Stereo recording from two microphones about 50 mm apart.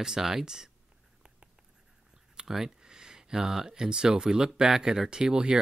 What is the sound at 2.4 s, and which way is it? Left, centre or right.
Speech, centre.